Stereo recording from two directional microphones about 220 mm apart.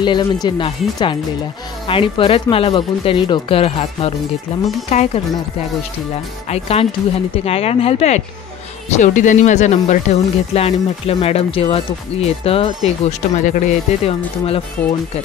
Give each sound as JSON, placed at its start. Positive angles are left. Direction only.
{"t": 0.0, "sound": "speech", "side_deg": 20}
{"t": 6.5, "sound": "speech", "side_deg": 25}